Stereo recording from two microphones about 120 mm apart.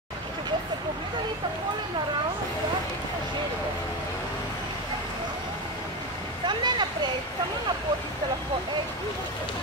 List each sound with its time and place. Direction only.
6.4 s vehicle: 40° right (ahead or behind)